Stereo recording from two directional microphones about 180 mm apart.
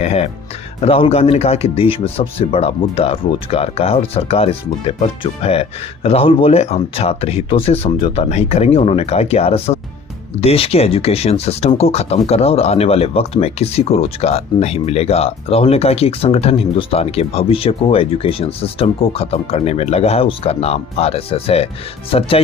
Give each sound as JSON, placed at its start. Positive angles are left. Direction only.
{"t": 0.0, "sound": "speech", "side_deg": 35}